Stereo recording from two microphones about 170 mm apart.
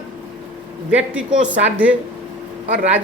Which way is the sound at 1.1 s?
10° right (ahead or behind).